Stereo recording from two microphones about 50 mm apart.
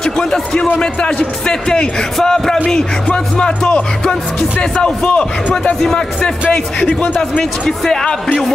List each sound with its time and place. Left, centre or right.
0.0 s music: centre
4.6 s speech: left
5.8 s music: centre
7.0 s speech: centre
7.6 s music: centre
8.0 s speech: centre